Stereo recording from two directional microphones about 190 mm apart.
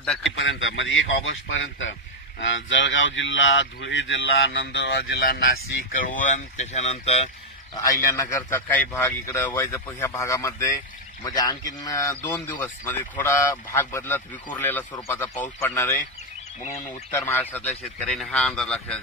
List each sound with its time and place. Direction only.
0.0 s a man's voice: centre (ahead or behind)
0.4 s speech: 80° left; by 7.2 s 35° left (ahead or behind)
7.7 s a man's voice: 15° left (ahead or behind)
17.1 s a man's voice: 10° left (ahead or behind)